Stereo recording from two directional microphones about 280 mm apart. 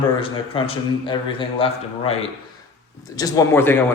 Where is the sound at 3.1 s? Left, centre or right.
Centre.